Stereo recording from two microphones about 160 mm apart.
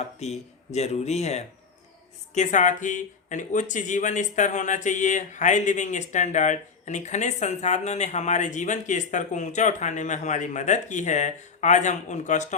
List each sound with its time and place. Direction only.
0.2 s speech: 40° left (ahead or behind)